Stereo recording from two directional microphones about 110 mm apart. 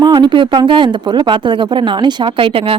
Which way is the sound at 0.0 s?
40° right (ahead or behind).